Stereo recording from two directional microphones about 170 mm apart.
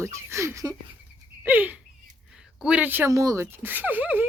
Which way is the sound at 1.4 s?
10° right (ahead or behind).